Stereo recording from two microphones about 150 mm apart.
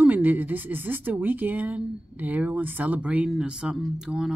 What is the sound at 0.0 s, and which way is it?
Speech, 10° right (ahead or behind).